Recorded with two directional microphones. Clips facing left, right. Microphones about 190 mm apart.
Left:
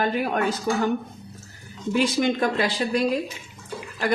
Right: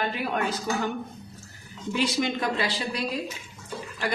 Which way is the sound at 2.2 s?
50° left (ahead or behind).